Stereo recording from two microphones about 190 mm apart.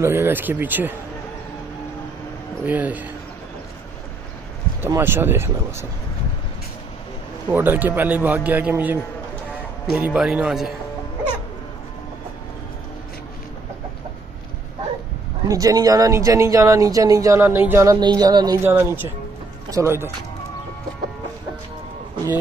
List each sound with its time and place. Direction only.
0.0 s speech: 10° right (ahead or behind)
2.6 s speech: 10° right (ahead or behind)
4.8 s speech: 10° right (ahead or behind)
7.4 s speech: 10° right (ahead or behind)
9.9 s a man's voice: 5° right (ahead or behind)
15.4 s speech: 20° right (ahead or behind)
17.9 s speech: 20° right (ahead or behind)
18.6 s speech: 10° right (ahead or behind)